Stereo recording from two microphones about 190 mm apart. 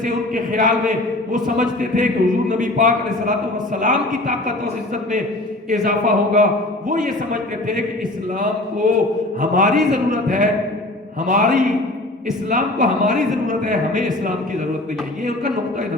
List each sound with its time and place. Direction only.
0.0 s a man's voice: 45° right (ahead or behind)
5.7 s a man's voice: 45° right (ahead or behind)
8.8 s a man's voice: 45° right (ahead or behind)